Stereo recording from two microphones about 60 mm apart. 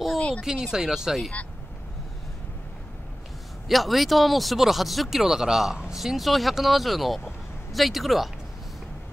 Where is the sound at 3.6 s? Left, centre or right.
Centre.